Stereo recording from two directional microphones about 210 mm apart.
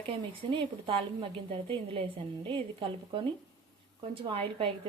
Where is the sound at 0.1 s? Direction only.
25° right (ahead or behind).